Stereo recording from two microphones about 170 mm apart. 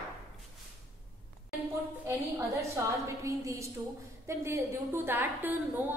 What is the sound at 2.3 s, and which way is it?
A woman's voice, 15° right (ahead or behind).